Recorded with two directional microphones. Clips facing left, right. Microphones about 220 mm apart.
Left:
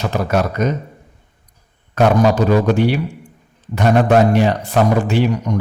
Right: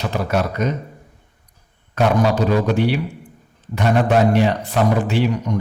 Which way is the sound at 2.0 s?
45° left (ahead or behind).